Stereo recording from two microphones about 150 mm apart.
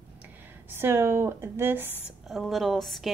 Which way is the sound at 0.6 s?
15° right (ahead or behind).